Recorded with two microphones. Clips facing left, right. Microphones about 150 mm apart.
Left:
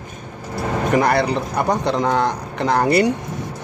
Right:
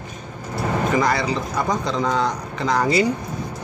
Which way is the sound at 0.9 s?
60° left (ahead or behind).